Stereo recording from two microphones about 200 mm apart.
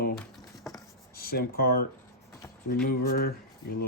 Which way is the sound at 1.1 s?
50° left (ahead or behind).